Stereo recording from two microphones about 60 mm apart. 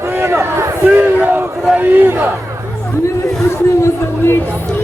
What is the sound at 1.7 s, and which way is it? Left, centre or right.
Speech, right.